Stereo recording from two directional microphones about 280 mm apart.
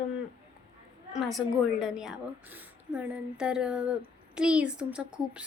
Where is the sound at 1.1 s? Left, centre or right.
Centre.